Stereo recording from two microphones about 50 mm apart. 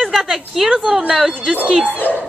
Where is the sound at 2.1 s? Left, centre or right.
Left.